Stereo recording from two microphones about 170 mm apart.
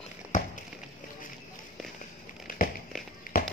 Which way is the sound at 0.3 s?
50° left (ahead or behind).